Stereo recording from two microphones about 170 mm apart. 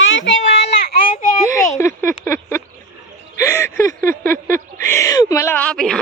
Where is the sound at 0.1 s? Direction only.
90° left.